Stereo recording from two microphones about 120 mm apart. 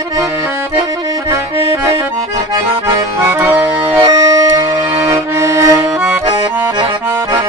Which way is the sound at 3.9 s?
30° right (ahead or behind).